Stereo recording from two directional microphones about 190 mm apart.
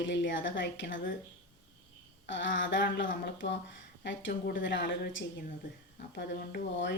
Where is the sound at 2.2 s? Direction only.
75° left (ahead or behind).